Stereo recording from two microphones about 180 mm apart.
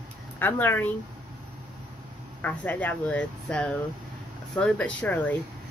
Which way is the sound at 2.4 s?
10° left (ahead or behind).